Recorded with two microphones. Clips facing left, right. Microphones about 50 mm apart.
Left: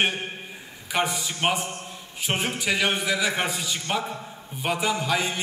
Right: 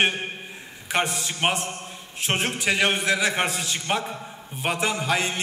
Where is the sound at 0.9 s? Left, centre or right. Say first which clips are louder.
Right 1 dB; centre.